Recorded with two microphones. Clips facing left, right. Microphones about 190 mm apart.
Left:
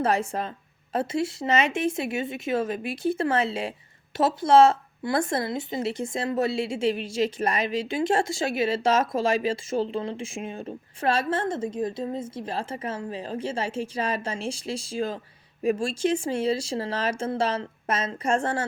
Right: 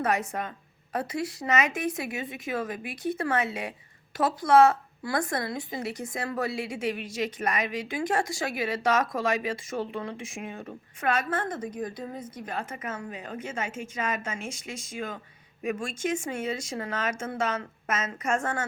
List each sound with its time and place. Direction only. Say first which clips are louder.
0.0 s speech: left 3 dB; 30° left (ahead or behind)